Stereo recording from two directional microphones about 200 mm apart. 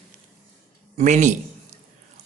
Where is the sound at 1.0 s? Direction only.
35° right (ahead or behind).